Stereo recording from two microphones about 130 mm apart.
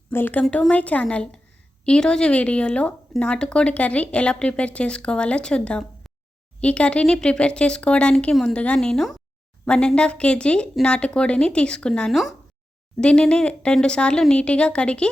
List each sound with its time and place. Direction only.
0.1 s speech: 15° left (ahead or behind)